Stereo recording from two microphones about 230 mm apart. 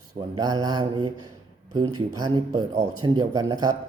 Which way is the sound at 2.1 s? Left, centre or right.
Centre.